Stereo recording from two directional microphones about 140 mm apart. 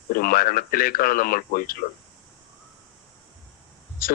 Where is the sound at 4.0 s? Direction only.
90° left.